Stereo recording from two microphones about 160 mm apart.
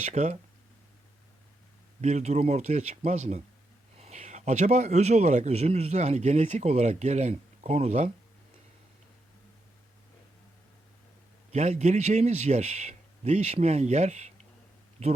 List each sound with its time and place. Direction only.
0.0 s speech: 45° right (ahead or behind)
2.0 s speech: 45° right (ahead or behind)
11.5 s speech: 45° right (ahead or behind)